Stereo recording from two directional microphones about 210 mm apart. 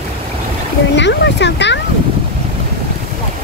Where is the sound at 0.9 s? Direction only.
55° left (ahead or behind).